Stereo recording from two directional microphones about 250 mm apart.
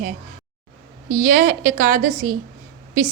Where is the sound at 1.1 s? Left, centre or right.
Right.